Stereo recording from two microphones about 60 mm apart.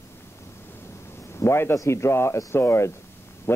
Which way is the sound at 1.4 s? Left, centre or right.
Left.